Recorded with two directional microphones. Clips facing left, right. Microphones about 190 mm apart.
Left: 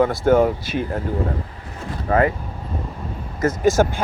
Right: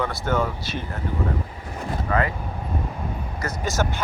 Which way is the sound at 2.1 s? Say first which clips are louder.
Left 7 dB; 45° left (ahead or behind).